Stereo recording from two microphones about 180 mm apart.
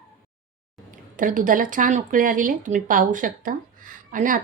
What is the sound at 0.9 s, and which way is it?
Speech, 50° right (ahead or behind).